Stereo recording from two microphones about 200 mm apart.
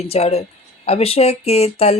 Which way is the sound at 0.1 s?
30° left (ahead or behind).